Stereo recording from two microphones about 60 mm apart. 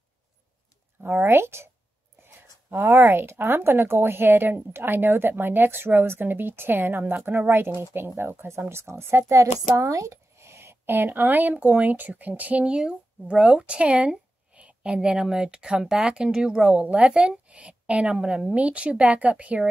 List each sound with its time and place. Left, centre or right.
1.0 s speech: right
2.9 s speech: right
12.6 s a woman's voice: centre